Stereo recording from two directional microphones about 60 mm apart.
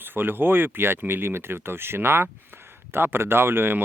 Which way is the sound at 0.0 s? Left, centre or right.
Right.